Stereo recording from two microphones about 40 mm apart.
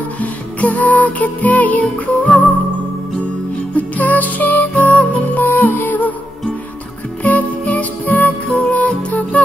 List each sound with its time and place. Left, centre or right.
0.2 s music: left
3.7 s music: left
7.2 s music: left